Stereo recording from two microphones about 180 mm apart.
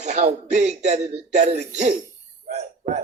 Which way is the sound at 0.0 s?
40° right (ahead or behind).